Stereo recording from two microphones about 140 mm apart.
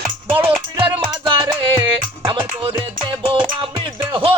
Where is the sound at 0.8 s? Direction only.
40° right (ahead or behind).